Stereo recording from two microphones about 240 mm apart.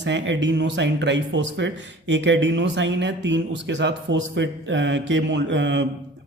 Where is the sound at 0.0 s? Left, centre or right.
Right.